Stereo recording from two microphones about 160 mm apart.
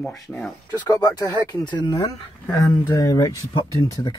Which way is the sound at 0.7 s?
25° left (ahead or behind).